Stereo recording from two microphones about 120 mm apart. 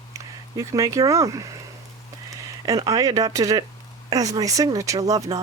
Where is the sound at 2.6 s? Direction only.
30° right (ahead or behind).